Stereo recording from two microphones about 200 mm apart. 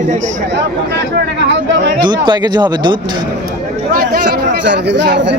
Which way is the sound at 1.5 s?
60° right (ahead or behind).